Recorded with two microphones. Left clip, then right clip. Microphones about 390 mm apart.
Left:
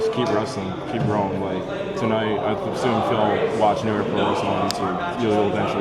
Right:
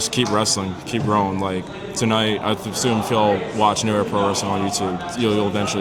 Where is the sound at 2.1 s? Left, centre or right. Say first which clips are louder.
Right 3 dB; right.